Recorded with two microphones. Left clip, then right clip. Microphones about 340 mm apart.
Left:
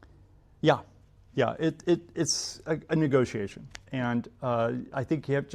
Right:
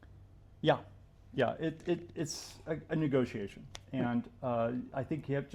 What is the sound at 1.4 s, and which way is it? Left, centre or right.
Speech, left.